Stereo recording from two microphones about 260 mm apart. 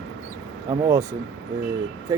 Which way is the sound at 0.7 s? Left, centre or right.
Centre.